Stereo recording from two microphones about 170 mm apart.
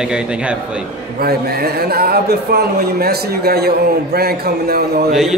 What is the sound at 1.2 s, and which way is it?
A man's voice, 65° right (ahead or behind).